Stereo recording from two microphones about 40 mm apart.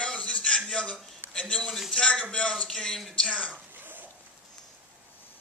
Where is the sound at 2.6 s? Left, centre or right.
Centre.